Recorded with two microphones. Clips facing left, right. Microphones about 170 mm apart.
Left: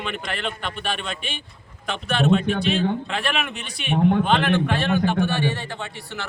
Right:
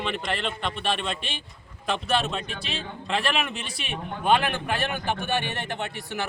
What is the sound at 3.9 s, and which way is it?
Speech, 65° left (ahead or behind).